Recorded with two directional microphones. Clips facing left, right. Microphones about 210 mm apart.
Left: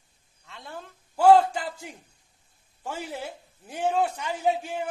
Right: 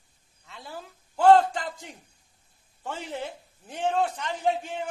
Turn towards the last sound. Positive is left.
turn(degrees=5)  # may be behind; listen again after turning